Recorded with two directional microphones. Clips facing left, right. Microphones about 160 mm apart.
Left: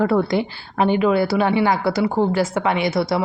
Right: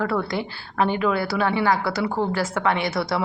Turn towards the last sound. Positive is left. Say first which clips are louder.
# left 4 dB
turn(degrees=15)  # may be behind; listen again after turning